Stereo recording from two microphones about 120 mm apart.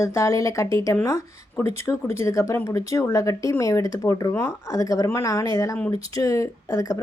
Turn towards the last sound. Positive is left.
turn(degrees=25)  # may be behind; listen again after turning